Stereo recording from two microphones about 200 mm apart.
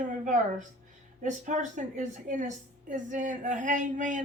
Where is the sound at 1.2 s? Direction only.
40° right (ahead or behind).